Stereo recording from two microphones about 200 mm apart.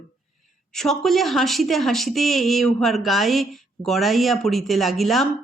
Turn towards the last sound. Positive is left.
turn(degrees=0)  # may be behind; listen again after turning